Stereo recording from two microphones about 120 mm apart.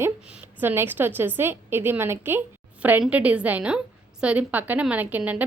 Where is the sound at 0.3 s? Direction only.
10° right (ahead or behind).